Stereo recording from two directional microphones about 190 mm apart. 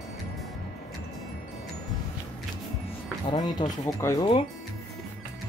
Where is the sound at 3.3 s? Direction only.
20° left (ahead or behind).